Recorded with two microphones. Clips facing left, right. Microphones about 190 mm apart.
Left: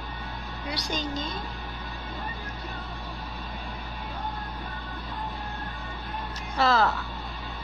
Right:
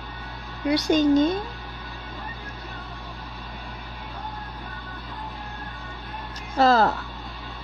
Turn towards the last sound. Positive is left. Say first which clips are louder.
# right 5 dB
turn(degrees=-40)  # may be behind; listen again after turning